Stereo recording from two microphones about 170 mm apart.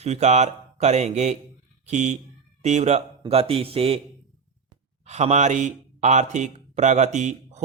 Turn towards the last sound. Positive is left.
turn(degrees=-45)  # may be behind; listen again after turning